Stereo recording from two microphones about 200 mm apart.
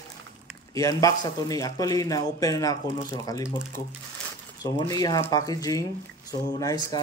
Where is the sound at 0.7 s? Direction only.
15° left (ahead or behind).